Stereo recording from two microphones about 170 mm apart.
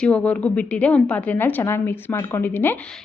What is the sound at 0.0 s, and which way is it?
A woman's voice, 5° left (ahead or behind).